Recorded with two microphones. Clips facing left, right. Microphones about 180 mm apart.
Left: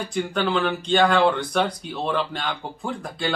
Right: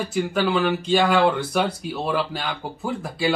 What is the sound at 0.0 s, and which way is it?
Speech, 5° right (ahead or behind).